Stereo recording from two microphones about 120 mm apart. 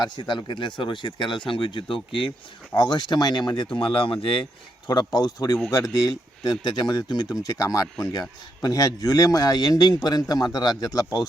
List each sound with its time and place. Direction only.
0.0 s a man's voice: 40° left (ahead or behind)
4.9 s a man's voice: 35° left (ahead or behind)